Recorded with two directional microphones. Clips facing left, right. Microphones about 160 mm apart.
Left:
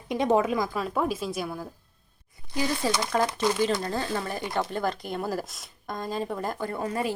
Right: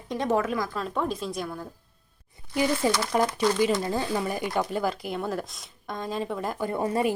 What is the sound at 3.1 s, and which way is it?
Speech, 15° right (ahead or behind).